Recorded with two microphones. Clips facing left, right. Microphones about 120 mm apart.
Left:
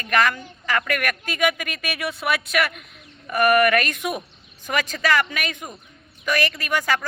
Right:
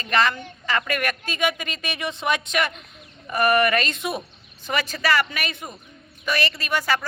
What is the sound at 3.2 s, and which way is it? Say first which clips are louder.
Speech: left 2 dB; 15° right (ahead or behind).